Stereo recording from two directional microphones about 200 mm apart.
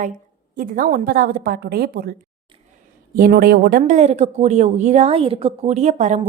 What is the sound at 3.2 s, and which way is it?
A woman's voice, 45° right (ahead or behind).